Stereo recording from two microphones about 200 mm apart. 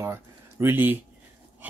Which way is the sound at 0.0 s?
10° right (ahead or behind).